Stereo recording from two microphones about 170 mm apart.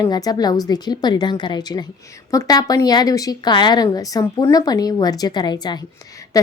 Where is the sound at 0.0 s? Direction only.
20° left (ahead or behind).